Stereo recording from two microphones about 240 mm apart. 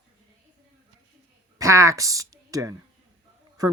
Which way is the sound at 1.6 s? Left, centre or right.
Centre.